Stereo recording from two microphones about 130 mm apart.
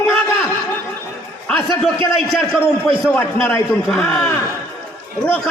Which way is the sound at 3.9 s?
5° left (ahead or behind).